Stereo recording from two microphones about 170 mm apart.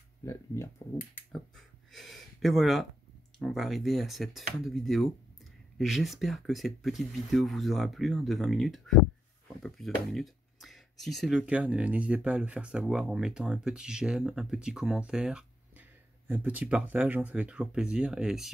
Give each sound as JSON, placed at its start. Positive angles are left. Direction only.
{"t": 0.2, "sound": "speech", "side_deg": 15}
{"t": 1.9, "sound": "speech", "side_deg": 0}